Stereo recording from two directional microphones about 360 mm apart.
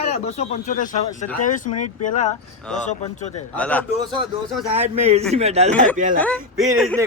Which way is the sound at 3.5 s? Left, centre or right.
Centre.